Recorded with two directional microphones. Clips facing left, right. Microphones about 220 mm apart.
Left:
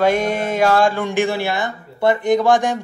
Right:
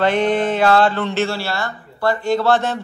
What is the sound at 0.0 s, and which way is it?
Speech, 10° left (ahead or behind).